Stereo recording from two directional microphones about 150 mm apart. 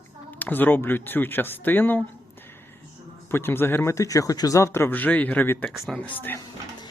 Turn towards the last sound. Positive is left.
turn(degrees=15)  # may be behind; listen again after turning